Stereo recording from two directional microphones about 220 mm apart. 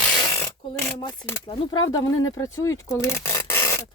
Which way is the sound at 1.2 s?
10° left (ahead or behind).